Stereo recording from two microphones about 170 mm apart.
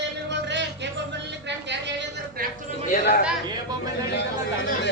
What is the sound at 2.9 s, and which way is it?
Speech, 60° left (ahead or behind).